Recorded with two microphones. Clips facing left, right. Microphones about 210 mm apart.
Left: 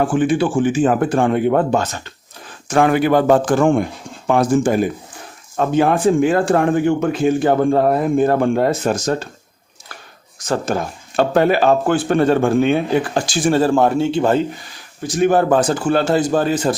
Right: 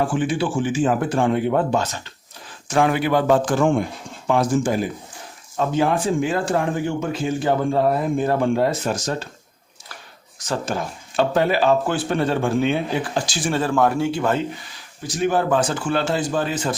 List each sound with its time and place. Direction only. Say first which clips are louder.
0.1 s speech: left 6 dB; 55° left (ahead or behind)
10.5 s speech: left 5 dB; 50° left (ahead or behind); by 14.4 s 30° left (ahead or behind)
15.2 s speech: left 5 dB; 50° left (ahead or behind)